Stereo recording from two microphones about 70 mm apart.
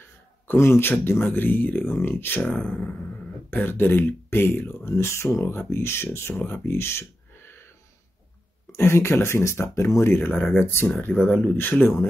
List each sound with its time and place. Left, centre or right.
0.6 s speech: left
8.7 s speech: left
10.3 s speech: centre
10.6 s speech: left